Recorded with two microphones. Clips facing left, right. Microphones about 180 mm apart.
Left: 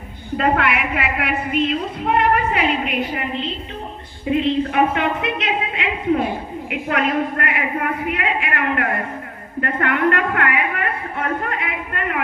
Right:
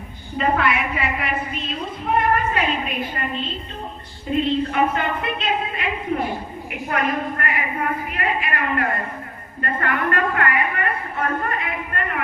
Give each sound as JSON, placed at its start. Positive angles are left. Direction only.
{"t": 0.3, "sound": "a woman's voice", "side_deg": 70}